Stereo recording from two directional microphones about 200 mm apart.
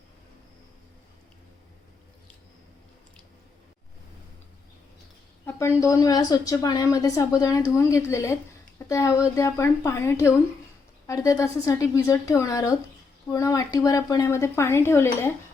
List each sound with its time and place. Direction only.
5.5 s speech: 15° left (ahead or behind)